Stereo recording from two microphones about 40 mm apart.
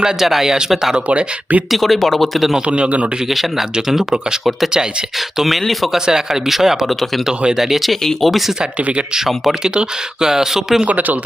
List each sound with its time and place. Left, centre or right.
0.2 s speech: centre
1.0 s speech: right
1.7 s speech: centre
2.6 s speech: right
3.8 s speech: centre
5.4 s speech: centre
6.1 s speech: centre
9.6 s speech: centre
10.8 s speech: right